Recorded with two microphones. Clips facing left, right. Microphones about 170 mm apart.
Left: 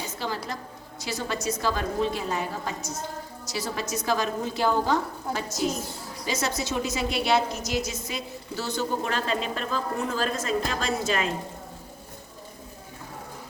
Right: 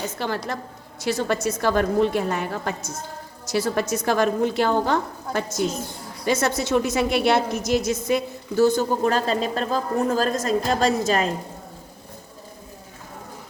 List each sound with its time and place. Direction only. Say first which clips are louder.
0.2 s a woman's voice: right 3 dB; 60° right (ahead or behind); by 11.3 s 40° right (ahead or behind)